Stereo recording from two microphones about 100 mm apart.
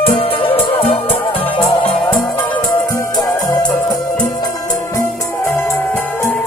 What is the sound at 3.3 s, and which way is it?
Music, 40° left (ahead or behind).